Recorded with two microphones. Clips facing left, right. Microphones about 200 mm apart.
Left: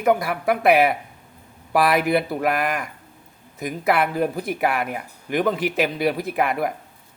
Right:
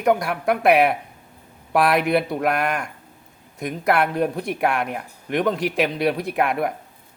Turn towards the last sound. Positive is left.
turn(degrees=0)  # may be behind; listen again after turning